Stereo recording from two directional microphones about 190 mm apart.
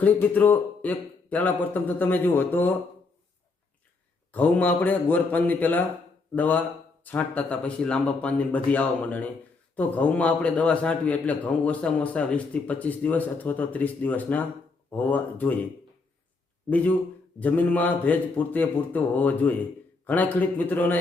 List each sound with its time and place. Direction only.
0.0 s a man's voice: 10° left (ahead or behind)
4.3 s a man's voice: 10° left (ahead or behind)
16.6 s a man's voice: 10° left (ahead or behind)